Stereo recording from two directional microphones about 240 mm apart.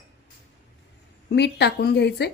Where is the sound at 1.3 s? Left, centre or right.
Left.